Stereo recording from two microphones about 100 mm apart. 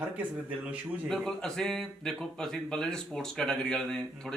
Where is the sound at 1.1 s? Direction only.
5° left (ahead or behind).